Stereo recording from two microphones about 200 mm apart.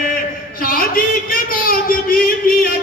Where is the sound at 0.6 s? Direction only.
45° left (ahead or behind).